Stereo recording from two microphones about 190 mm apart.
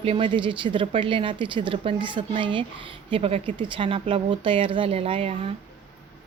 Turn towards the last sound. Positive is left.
turn(degrees=-30)  # may be behind; listen again after turning